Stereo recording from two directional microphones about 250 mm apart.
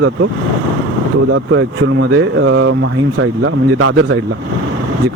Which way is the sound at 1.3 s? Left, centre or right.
Right.